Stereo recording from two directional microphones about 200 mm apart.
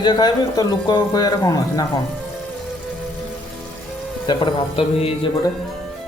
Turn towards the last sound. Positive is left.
turn(degrees=30)  # may be behind; listen again after turning